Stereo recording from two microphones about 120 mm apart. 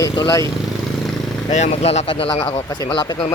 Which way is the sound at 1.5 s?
75° left (ahead or behind).